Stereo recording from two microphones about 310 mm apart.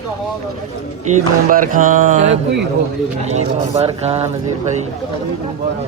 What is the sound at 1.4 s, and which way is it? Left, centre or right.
Speech, right.